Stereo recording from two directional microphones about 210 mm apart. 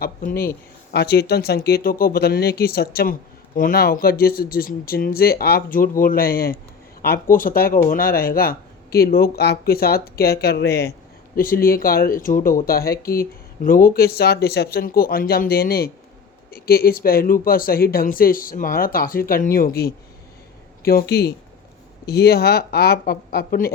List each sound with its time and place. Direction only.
0.0 s speech: 40° left (ahead or behind)